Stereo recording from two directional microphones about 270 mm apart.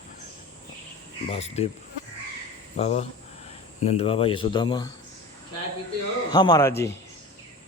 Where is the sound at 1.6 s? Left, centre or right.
Left.